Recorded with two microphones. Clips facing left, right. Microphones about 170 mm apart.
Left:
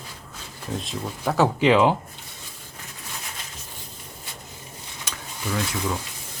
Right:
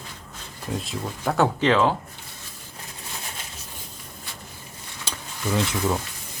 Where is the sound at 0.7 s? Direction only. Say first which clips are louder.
Even; centre (ahead or behind).